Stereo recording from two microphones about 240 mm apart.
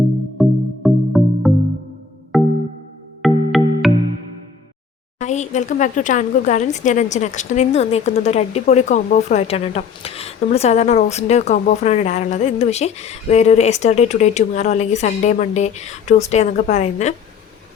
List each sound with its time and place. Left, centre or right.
0.3 s music: centre
5.2 s speech: left